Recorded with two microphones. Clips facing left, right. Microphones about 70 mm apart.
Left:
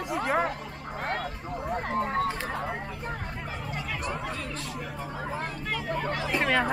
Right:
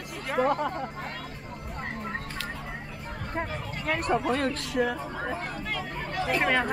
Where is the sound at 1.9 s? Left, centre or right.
Left.